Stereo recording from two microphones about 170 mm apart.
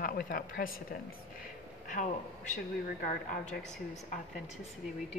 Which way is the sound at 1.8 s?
50° left (ahead or behind).